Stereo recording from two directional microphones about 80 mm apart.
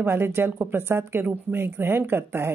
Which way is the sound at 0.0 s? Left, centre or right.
Right.